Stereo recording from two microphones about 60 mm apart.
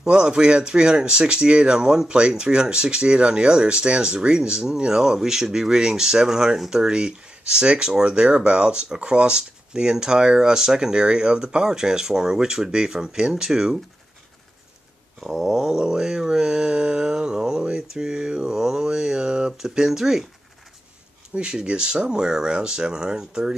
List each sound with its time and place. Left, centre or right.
0.0 s speech: centre
15.1 s speech: centre
21.4 s speech: centre